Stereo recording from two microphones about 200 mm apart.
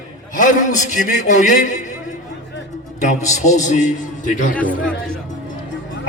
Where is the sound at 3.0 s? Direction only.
35° left (ahead or behind).